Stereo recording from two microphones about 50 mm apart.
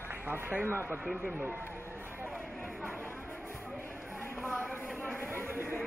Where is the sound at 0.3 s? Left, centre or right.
Right.